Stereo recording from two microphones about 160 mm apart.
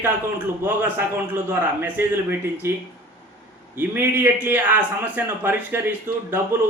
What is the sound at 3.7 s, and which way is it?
A man's voice, 15° right (ahead or behind).